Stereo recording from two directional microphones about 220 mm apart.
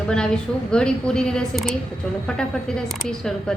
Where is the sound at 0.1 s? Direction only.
5° left (ahead or behind).